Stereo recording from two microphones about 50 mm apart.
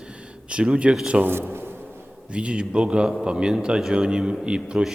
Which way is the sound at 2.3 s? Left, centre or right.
Right.